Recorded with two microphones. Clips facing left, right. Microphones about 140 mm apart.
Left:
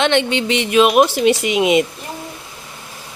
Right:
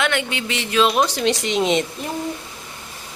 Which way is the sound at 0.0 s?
25° left (ahead or behind).